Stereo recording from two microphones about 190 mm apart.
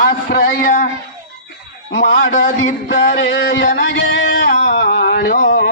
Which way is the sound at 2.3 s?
40° left (ahead or behind).